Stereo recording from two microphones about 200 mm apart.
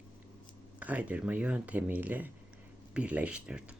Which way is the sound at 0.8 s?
5° right (ahead or behind).